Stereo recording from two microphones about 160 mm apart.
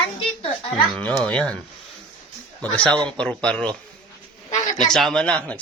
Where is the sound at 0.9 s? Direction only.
5° left (ahead or behind).